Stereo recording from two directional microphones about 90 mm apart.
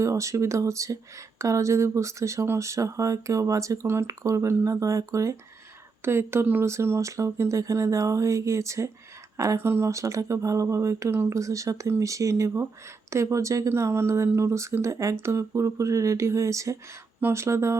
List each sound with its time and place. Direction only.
0.0 s speech: 35° right (ahead or behind)